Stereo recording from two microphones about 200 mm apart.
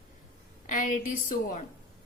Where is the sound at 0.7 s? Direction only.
40° left (ahead or behind).